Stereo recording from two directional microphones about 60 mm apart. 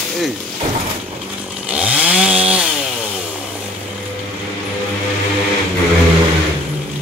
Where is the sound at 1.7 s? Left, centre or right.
Right.